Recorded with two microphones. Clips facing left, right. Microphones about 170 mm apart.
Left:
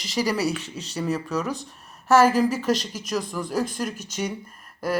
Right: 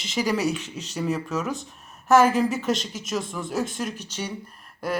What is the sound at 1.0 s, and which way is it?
Speech, centre (ahead or behind).